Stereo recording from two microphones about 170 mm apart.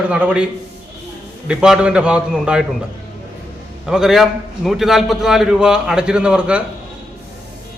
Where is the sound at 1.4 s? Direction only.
5° right (ahead or behind).